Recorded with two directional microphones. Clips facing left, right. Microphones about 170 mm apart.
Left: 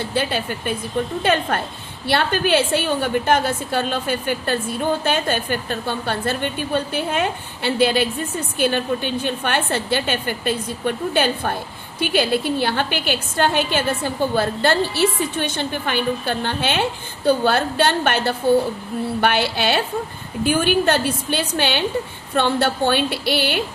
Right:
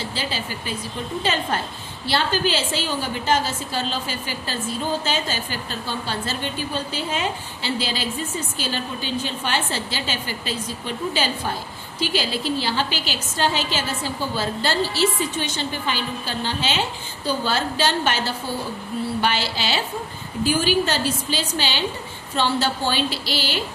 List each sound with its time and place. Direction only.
0.0 s a woman's voice: 60° left (ahead or behind)